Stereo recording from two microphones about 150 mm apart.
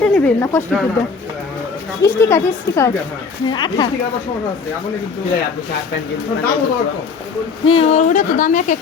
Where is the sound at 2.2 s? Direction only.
20° left (ahead or behind).